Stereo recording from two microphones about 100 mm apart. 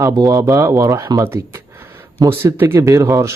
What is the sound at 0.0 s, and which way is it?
Speech, 35° right (ahead or behind).